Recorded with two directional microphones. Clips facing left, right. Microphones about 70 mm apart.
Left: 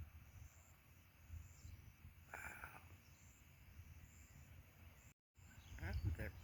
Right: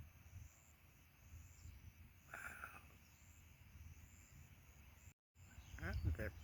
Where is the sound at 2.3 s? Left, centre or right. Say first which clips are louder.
Right 1 dB; left.